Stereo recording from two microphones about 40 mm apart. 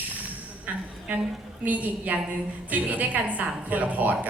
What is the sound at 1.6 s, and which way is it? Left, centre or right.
A woman's voice, right.